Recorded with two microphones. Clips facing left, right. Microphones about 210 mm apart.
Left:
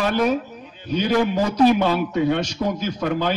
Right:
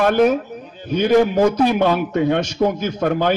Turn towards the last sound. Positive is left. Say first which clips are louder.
# right 4 dB
turn(degrees=-50)  # may be behind; listen again after turning